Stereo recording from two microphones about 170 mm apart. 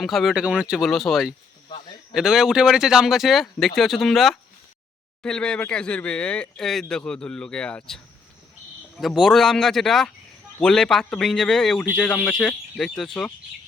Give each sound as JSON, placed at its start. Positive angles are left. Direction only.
{"t": 0.0, "sound": "speech", "side_deg": 0}